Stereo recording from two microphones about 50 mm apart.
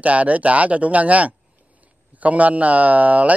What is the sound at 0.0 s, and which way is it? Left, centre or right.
Speech, right.